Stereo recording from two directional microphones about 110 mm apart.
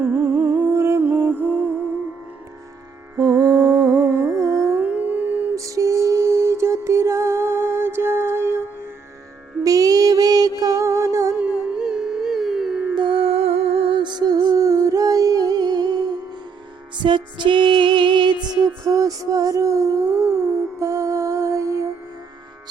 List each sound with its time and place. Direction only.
0.0 s humming: 20° right (ahead or behind)
3.2 s humming: 35° right (ahead or behind); by 5.5 s 15° right (ahead or behind)
5.5 s music: 30° right (ahead or behind)
9.6 s mantra: 35° right (ahead or behind)
10.6 s music: 30° right (ahead or behind)
11.3 s music: 10° right (ahead or behind)
13.0 s music: 55° right (ahead or behind)
13.9 s music: 40° right (ahead or behind)
14.5 s humming: 30° right (ahead or behind)
17.0 s music: 45° right (ahead or behind); by 21.8 s 25° right (ahead or behind)